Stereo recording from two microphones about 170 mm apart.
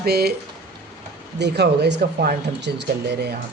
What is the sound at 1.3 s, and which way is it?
Speech, 80° right.